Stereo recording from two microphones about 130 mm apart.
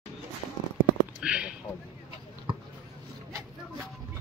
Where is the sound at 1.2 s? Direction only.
10° right (ahead or behind).